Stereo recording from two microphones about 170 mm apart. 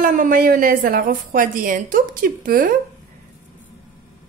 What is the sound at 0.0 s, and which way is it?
A woman's voice, 55° right (ahead or behind).